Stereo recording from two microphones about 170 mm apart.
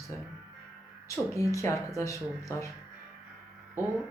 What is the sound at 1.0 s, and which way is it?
Speech, 20° left (ahead or behind).